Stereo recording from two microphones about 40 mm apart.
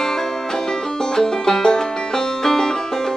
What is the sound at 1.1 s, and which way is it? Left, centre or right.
Music, centre.